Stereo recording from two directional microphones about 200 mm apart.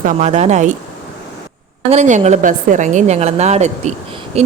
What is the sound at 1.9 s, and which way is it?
Speech, 35° right (ahead or behind).